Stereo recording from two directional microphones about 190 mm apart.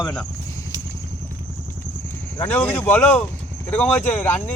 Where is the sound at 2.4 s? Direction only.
10° left (ahead or behind).